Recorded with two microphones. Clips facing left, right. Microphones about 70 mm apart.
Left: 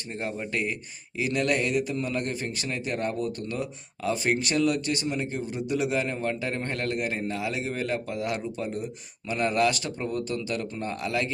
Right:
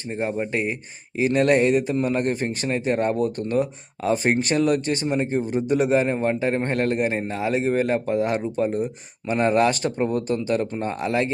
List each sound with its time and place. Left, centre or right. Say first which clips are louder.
0.1 s speech: right 6 dB; right
1.2 s a man's voice: right 8 dB; right